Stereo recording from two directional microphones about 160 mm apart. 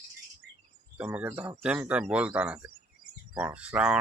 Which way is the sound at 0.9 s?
10° right (ahead or behind).